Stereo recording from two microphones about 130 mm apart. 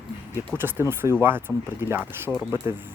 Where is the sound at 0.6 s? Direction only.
15° right (ahead or behind).